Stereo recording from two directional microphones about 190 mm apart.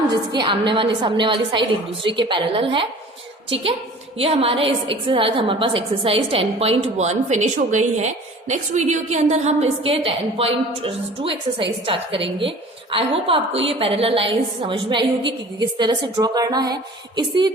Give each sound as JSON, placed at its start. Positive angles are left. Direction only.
{"t": 0.1, "sound": "a woman's voice", "side_deg": -25}